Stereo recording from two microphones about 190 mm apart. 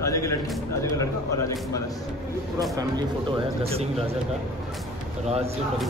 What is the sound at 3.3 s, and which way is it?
Speech, 30° right (ahead or behind).